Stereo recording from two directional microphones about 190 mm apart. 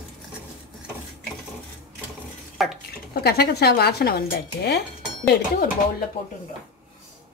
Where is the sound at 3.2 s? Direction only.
60° left (ahead or behind).